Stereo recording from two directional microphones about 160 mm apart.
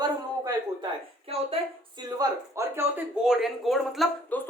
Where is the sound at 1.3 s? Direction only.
40° right (ahead or behind).